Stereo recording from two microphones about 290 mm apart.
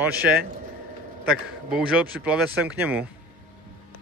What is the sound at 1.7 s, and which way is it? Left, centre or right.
Speech, centre.